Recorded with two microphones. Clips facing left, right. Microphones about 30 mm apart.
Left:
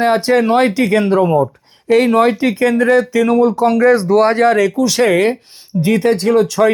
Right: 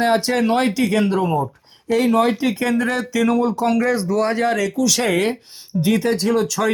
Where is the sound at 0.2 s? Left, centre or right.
Left.